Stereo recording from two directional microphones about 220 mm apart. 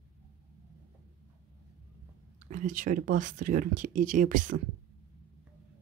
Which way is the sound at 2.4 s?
35° right (ahead or behind).